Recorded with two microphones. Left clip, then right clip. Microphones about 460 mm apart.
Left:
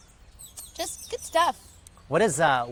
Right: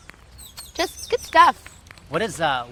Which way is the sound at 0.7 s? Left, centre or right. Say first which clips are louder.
Right 10 dB; right.